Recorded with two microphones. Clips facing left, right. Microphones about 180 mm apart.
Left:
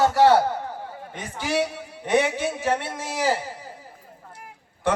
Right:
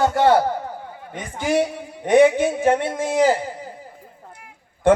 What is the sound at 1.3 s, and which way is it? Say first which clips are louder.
A man's voice: right 5 dB; 50° right (ahead or behind).